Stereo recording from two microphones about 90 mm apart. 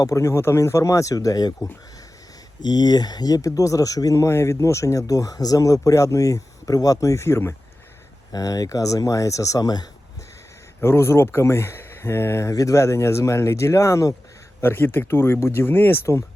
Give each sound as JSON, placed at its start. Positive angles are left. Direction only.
{"t": 0.0, "sound": "speech", "side_deg": 35}
{"t": 2.6, "sound": "speech", "side_deg": 50}
{"t": 8.3, "sound": "speech", "side_deg": 40}
{"t": 10.8, "sound": "speech", "side_deg": 30}
{"t": 14.6, "sound": "speech", "side_deg": 25}